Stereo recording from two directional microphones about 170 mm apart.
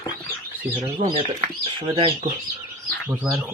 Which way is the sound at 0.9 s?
35° right (ahead or behind).